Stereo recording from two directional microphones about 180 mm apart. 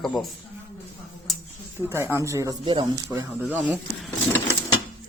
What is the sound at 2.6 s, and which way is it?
Speech, 25° right (ahead or behind).